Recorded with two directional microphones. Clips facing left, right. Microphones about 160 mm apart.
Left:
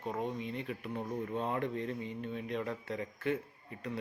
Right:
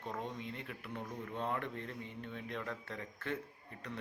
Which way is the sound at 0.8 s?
35° left (ahead or behind).